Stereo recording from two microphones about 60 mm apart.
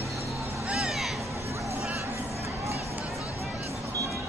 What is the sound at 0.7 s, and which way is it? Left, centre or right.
Music, centre.